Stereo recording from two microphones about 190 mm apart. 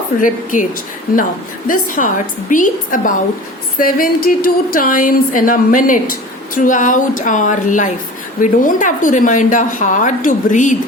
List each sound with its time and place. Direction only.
0.2 s a woman's voice: 45° left (ahead or behind)
1.6 s a woman's voice: 45° left (ahead or behind)